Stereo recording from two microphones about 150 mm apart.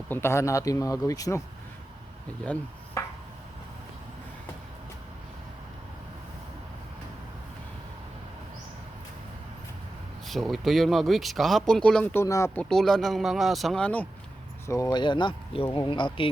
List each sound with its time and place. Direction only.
0.1 s speech: 15° left (ahead or behind)
3.0 s a sound: 20° left (ahead or behind)
10.2 s speech: centre (ahead or behind)
12.1 s speech: 20° left (ahead or behind)
12.5 s speech: 5° left (ahead or behind)
14.7 s speech: 25° left (ahead or behind)